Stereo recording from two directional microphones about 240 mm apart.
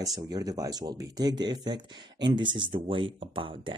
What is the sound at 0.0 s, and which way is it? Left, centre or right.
Speech, centre.